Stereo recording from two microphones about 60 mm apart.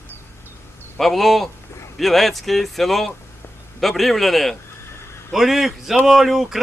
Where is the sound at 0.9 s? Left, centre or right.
Centre.